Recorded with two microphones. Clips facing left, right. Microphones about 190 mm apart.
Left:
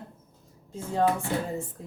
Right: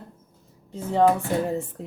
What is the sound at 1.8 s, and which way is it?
Speech, 70° right (ahead or behind).